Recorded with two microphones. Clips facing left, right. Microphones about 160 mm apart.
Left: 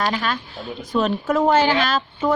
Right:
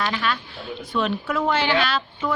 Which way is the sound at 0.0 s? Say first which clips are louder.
Left 2 dB; 40° left (ahead or behind).